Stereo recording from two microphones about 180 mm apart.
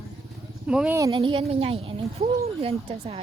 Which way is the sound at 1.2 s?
30° right (ahead or behind).